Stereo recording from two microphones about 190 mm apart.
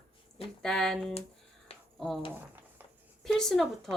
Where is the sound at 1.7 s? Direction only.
30° left (ahead or behind).